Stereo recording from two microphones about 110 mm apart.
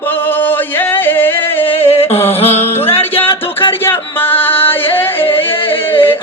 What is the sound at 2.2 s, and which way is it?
Music, 65° left (ahead or behind).